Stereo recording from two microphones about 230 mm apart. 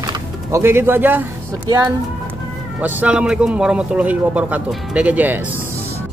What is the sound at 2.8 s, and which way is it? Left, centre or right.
A man's voice, centre.